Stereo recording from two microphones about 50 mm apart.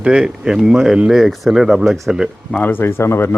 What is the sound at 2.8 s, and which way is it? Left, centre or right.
Speech, left.